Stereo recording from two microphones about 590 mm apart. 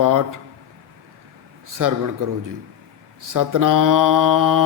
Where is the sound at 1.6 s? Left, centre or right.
Right.